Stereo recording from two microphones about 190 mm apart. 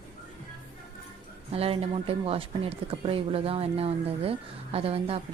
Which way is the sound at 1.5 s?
30° right (ahead or behind).